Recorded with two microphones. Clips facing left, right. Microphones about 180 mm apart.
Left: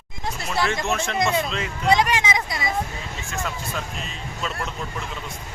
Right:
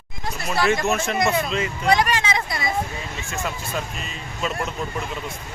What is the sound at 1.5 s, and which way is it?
Speech, 5° right (ahead or behind).